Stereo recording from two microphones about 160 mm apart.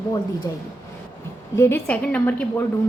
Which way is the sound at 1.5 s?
15° left (ahead or behind).